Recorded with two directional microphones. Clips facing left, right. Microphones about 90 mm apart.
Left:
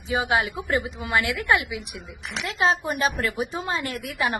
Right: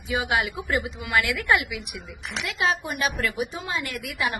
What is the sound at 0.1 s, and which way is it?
A woman's voice, 30° left (ahead or behind).